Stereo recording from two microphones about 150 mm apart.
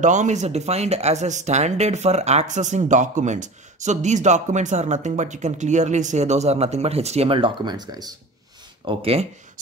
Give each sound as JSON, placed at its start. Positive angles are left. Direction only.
{"t": 0.0, "sound": "speech", "side_deg": -55}
{"t": 8.8, "sound": "speech", "side_deg": -40}